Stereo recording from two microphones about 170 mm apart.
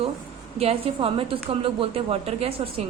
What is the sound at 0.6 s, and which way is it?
A woman's voice, 35° right (ahead or behind).